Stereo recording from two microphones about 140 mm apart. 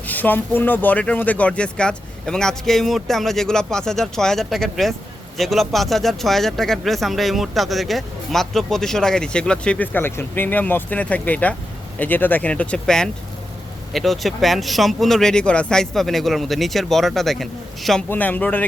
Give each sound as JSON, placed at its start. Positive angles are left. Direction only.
{"t": 0.1, "sound": "speech", "side_deg": 15}
{"t": 18.1, "sound": "speech", "side_deg": 10}